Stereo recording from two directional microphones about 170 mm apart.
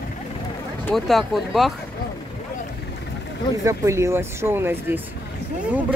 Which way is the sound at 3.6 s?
15° right (ahead or behind).